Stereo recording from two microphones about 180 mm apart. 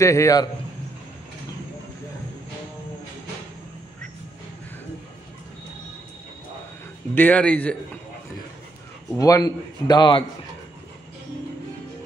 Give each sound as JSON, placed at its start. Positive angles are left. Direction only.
{"t": 0.0, "sound": "a man's voice", "side_deg": 15}
{"t": 7.2, "sound": "a man's voice", "side_deg": 10}
{"t": 9.1, "sound": "a man's voice", "side_deg": 20}